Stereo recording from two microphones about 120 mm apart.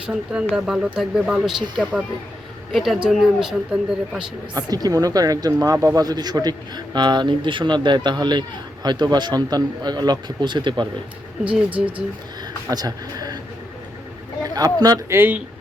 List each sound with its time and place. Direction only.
0.1 s speech: 5° right (ahead or behind)
4.5 s speech: 30° right (ahead or behind)
11.4 s speech: 10° right (ahead or behind)
12.7 s speech: 35° right (ahead or behind)
14.4 s speech: 30° right (ahead or behind)
15.1 s speech: 15° right (ahead or behind)